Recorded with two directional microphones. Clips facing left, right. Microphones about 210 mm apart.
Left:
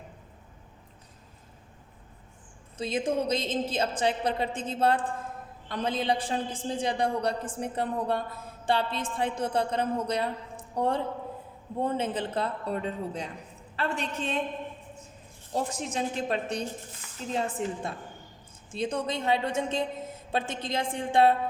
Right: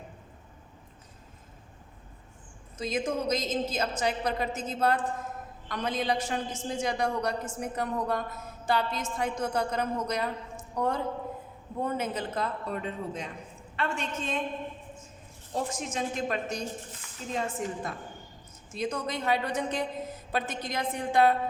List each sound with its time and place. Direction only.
2.7 s a man's voice: 30° left (ahead or behind)
15.5 s a man's voice: 35° left (ahead or behind)